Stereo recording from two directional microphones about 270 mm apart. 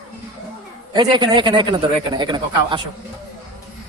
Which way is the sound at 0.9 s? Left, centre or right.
Centre.